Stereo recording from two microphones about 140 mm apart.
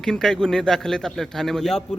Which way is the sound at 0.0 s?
5° left (ahead or behind).